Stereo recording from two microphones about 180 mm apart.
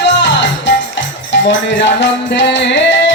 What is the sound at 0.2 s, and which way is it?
Music, 80° left.